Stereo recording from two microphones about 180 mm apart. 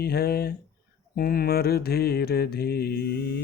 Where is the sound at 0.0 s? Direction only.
60° left (ahead or behind).